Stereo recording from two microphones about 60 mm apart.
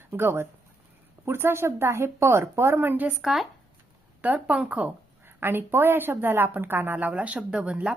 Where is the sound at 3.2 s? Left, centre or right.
Centre.